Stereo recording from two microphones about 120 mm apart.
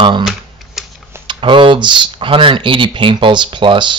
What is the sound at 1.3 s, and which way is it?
Speech, 45° right (ahead or behind).